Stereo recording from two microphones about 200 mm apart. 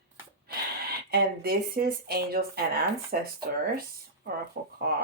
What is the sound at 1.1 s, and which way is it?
Speech, 50° right (ahead or behind).